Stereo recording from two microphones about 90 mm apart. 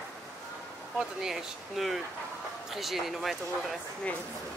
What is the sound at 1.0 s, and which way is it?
Speech, 5° right (ahead or behind).